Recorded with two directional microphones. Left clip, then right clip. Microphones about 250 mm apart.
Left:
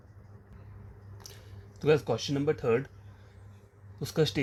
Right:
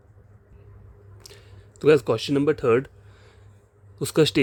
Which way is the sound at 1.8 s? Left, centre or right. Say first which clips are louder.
Right 8 dB; right.